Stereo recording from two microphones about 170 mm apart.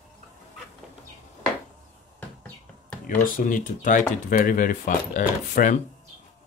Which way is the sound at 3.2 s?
50° left (ahead or behind).